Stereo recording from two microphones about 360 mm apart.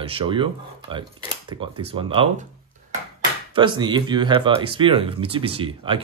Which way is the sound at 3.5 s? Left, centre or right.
Centre.